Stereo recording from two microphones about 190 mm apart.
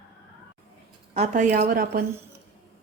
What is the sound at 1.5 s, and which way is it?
Speech, 50° right (ahead or behind).